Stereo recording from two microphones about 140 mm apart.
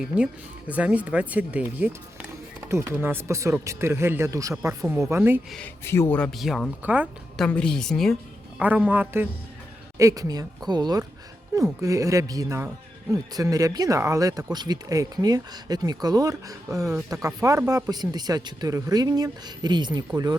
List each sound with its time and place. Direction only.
0.7 s speech: 10° right (ahead or behind)
5.5 s a woman's voice: 5° left (ahead or behind)
5.8 s speech: 20° left (ahead or behind)
6.3 s a woman's voice: centre (ahead or behind)
8.5 s a man's voice: 10° right (ahead or behind)
10.0 s speech: 25° right (ahead or behind)